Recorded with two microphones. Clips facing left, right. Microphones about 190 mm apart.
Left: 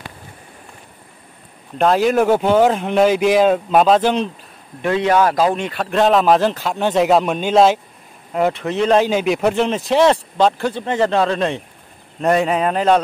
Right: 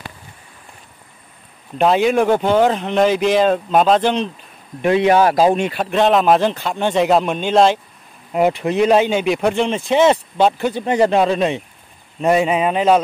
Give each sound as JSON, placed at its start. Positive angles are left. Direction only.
{"t": 1.8, "sound": "speech", "side_deg": 0}
{"t": 4.8, "sound": "speech", "side_deg": -15}
{"t": 5.1, "sound": "speech", "side_deg": -30}
{"t": 5.6, "sound": "speech", "side_deg": -10}
{"t": 8.3, "sound": "speech", "side_deg": -10}
{"t": 9.0, "sound": "speech", "side_deg": 0}